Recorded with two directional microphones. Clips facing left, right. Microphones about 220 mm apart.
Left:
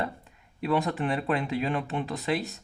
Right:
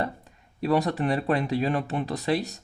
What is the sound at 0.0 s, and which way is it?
Speech, 40° right (ahead or behind).